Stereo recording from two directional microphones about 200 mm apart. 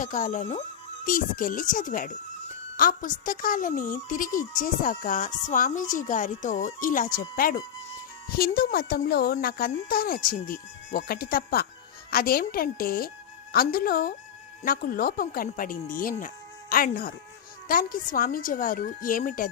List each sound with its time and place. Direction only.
0.0 s a woman's voice: 40° left (ahead or behind)